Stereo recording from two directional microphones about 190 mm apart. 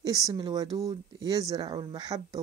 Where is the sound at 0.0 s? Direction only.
20° right (ahead or behind).